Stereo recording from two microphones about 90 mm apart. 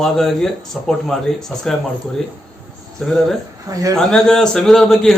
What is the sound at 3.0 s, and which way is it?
Speech, centre (ahead or behind).